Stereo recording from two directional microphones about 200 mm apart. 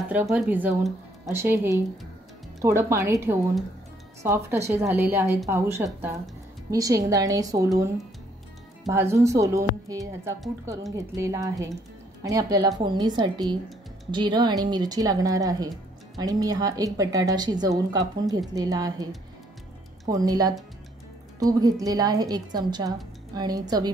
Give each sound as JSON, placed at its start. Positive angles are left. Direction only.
{"t": 0.1, "sound": "speech", "side_deg": -10}
{"t": 20.1, "sound": "speech", "side_deg": -20}